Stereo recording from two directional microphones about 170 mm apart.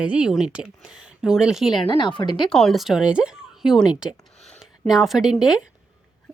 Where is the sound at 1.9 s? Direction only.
30° left (ahead or behind).